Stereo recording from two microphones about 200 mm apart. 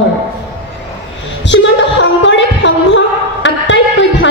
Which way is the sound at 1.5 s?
65° left (ahead or behind).